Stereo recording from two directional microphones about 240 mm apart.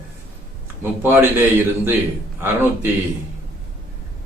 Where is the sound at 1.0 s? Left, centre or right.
Centre.